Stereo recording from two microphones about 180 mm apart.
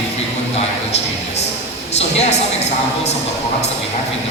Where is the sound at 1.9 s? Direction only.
35° left (ahead or behind).